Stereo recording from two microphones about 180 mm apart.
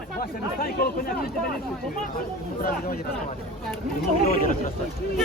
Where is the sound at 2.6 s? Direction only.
55° left (ahead or behind).